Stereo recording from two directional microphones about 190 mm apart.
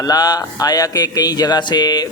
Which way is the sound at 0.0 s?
20° left (ahead or behind).